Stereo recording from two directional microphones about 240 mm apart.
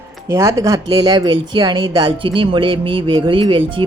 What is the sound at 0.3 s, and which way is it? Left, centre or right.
A woman's voice, centre.